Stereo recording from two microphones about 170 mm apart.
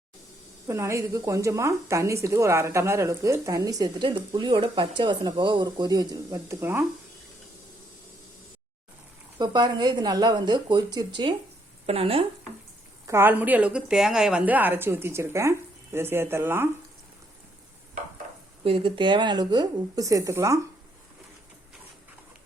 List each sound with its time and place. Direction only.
0.7 s a woman's voice: 15° right (ahead or behind)
9.4 s speech: 25° right (ahead or behind)
13.1 s a woman's voice: 15° right (ahead or behind)
18.6 s speech: 30° right (ahead or behind)